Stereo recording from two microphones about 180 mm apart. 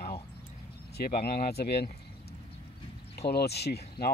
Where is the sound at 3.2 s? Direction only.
65° left (ahead or behind).